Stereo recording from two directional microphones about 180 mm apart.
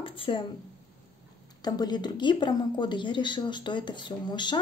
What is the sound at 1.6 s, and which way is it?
A woman's voice, 25° left (ahead or behind).